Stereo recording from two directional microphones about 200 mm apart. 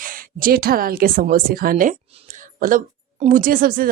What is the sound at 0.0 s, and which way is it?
A woman's voice, 45° right (ahead or behind).